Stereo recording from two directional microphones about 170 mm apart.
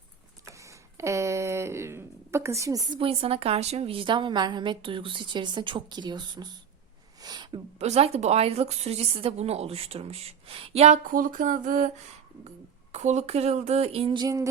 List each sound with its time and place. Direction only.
0.5 s speech: 20° right (ahead or behind)
7.2 s a sound: 25° right (ahead or behind)
7.8 s a woman's voice: 40° right (ahead or behind)
12.9 s a woman's voice: 45° right (ahead or behind); by 14.4 s 20° right (ahead or behind)